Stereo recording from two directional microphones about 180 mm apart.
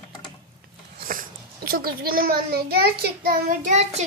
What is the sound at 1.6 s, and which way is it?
A child's voice, 55° right (ahead or behind).